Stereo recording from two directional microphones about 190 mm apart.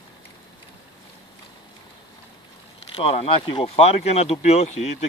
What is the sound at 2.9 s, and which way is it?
Speech, 30° left (ahead or behind).